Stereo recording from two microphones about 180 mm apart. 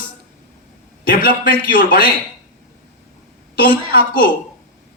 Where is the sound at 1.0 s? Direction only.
55° left (ahead or behind).